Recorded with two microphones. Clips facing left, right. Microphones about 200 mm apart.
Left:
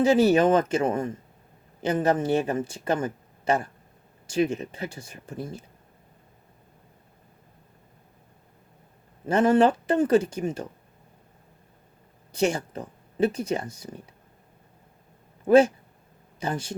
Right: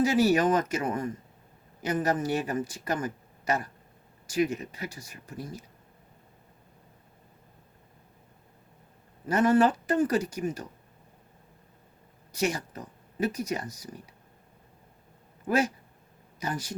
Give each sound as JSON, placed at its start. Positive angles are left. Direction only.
{"t": 0.0, "sound": "speech", "side_deg": 25}
{"t": 9.2, "sound": "speech", "side_deg": 25}
{"t": 12.3, "sound": "speech", "side_deg": 30}
{"t": 15.4, "sound": "speech", "side_deg": 25}